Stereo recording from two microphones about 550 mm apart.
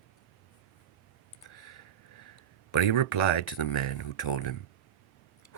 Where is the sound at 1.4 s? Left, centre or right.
Left.